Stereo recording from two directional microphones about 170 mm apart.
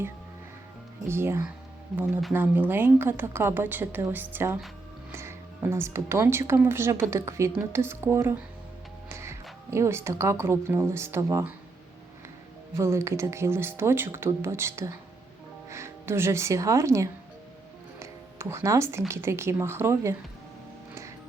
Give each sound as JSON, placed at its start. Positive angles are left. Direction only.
{"t": 1.0, "sound": "a woman's voice", "side_deg": -15}
{"t": 12.7, "sound": "a woman's voice", "side_deg": -15}